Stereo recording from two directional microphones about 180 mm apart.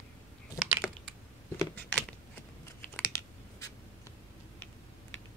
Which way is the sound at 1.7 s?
5° left (ahead or behind).